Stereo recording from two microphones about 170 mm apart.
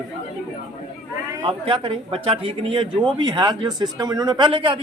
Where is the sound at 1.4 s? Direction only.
30° right (ahead or behind).